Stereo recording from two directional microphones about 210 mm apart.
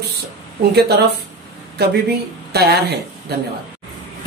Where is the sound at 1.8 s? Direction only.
50° right (ahead or behind).